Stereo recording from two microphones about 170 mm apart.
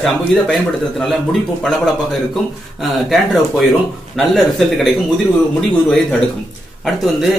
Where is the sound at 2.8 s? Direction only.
Centre (ahead or behind).